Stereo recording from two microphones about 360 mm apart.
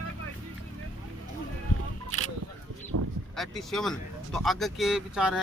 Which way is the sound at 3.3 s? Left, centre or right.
Centre.